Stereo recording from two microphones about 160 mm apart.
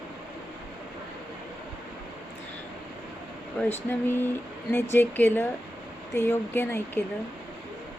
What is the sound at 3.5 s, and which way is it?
Speech, 15° left (ahead or behind).